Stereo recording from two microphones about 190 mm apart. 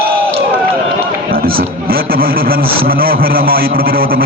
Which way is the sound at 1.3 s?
50° right (ahead or behind).